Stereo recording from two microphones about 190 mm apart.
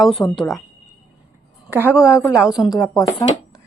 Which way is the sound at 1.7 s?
10° right (ahead or behind).